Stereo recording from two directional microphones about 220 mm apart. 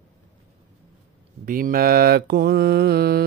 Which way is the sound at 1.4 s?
40° right (ahead or behind).